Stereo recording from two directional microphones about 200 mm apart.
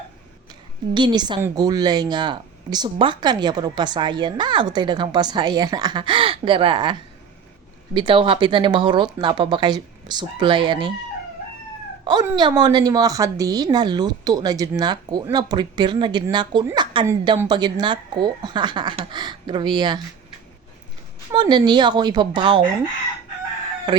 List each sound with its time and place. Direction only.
0.9 s a woman's voice: 20° right (ahead or behind)
7.9 s a woman's voice: 25° right (ahead or behind)
12.0 s a woman's voice: 20° right (ahead or behind)
21.3 s a woman's voice: 20° right (ahead or behind)
23.9 s a woman's voice: 20° right (ahead or behind)